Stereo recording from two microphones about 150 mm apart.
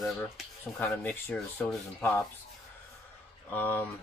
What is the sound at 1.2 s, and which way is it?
Speech, 10° left (ahead or behind).